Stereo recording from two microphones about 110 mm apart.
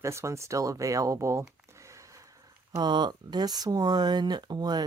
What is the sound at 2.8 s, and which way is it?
A woman's voice, 40° right (ahead or behind).